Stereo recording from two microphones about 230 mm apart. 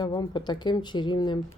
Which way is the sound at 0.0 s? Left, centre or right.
Centre.